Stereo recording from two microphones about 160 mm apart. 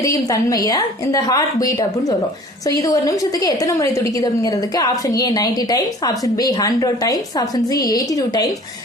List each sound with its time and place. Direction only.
0.0 s a woman's voice: 20° left (ahead or behind)